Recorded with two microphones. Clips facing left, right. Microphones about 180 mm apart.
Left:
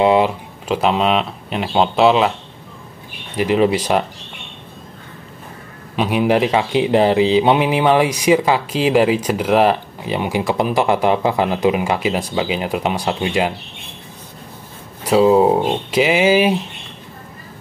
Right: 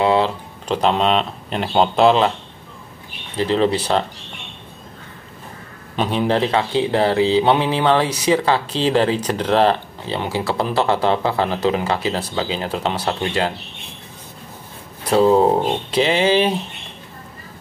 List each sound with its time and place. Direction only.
0.0 s speech: 15° left (ahead or behind)
0.7 s speech: 5° left (ahead or behind)
3.3 s speech: 10° left (ahead or behind)
5.9 s speech: 10° left (ahead or behind)
15.0 s speech: 10° left (ahead or behind)